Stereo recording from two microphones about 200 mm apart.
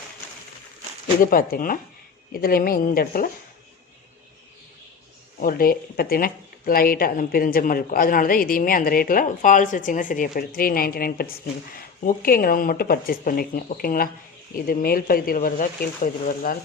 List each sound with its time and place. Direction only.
1.2 s speech: 45° left (ahead or behind)
5.4 s speech: 45° left (ahead or behind)